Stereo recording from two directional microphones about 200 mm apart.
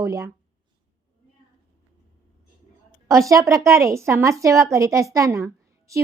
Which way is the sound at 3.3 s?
15° right (ahead or behind).